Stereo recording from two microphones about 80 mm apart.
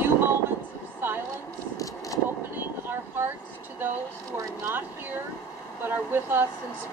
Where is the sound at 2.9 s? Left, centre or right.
Right.